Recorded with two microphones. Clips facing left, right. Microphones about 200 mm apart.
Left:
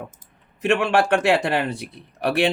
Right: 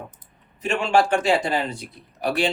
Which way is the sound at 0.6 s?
65° left (ahead or behind).